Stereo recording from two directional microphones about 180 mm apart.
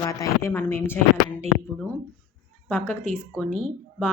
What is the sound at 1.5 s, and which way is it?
Speech, 40° right (ahead or behind).